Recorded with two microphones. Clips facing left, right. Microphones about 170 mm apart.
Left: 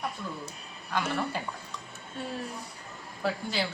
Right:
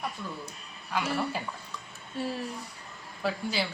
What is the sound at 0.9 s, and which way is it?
Speech, 5° right (ahead or behind).